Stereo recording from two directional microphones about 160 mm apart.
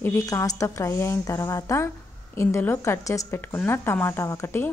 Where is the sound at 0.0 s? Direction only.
15° left (ahead or behind).